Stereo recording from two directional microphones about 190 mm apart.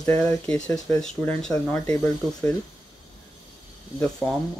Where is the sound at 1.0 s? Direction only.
5° left (ahead or behind).